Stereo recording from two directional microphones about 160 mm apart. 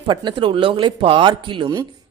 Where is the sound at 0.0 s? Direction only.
30° right (ahead or behind).